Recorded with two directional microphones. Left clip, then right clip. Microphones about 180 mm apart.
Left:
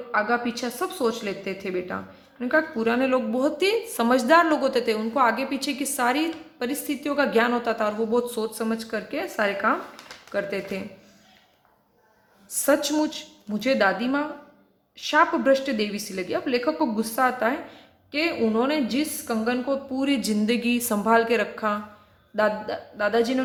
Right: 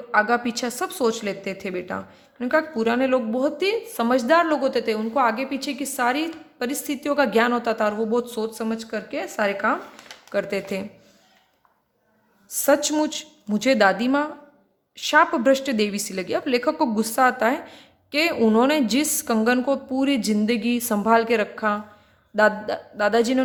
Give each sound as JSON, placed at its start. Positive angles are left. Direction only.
{"t": 0.1, "sound": "a woman's voice", "side_deg": -25}
{"t": 12.5, "sound": "a woman's voice", "side_deg": -15}